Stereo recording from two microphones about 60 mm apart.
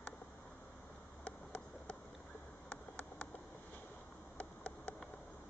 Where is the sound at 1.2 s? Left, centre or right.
Left.